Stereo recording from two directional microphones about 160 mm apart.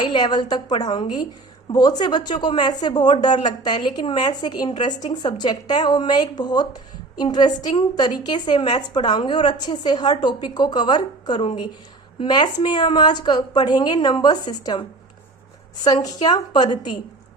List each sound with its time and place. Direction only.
0.0 s a woman's voice: 25° left (ahead or behind)